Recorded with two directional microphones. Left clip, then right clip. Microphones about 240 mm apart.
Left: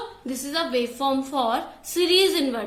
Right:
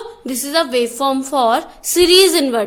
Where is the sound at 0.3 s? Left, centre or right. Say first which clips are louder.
Right 9 dB; right.